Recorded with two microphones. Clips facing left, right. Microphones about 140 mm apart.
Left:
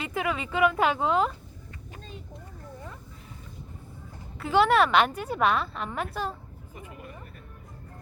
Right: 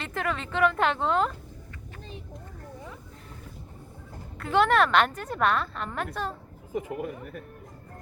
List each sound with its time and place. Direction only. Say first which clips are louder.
0.0 s a woman's voice: left 1 dB; 5° left (ahead or behind)
4.4 s a woman's voice: left 1 dB; centre (ahead or behind)
6.7 s speech: right 12 dB; 80° right